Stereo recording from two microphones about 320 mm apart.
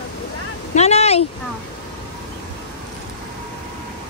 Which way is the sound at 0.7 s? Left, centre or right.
Centre.